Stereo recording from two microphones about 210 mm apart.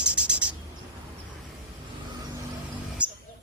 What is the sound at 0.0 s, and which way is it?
Bird, 5° right (ahead or behind).